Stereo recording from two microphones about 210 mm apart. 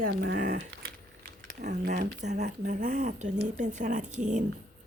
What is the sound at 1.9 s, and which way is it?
Speech, 40° right (ahead or behind).